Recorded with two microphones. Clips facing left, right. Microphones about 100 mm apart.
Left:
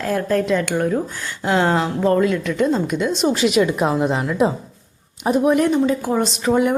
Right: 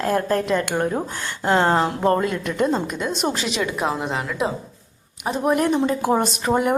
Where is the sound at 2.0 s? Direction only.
45° right (ahead or behind).